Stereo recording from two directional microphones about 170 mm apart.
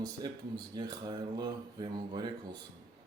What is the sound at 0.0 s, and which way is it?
Speech, 25° right (ahead or behind).